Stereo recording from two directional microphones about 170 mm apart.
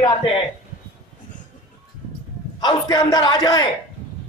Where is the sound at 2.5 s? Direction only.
25° left (ahead or behind).